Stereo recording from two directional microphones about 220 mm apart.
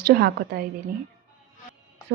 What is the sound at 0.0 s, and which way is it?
Speech, 45° right (ahead or behind).